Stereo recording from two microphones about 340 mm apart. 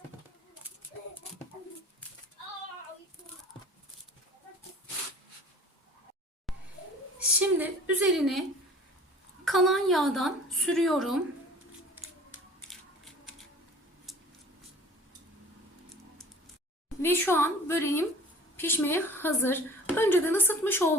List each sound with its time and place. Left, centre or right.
7.3 s a woman's voice: centre
14.1 s a sound: centre
17.0 s a woman's voice: centre